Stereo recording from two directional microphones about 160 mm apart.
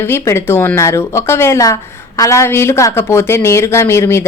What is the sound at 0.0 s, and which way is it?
Speech, 15° left (ahead or behind).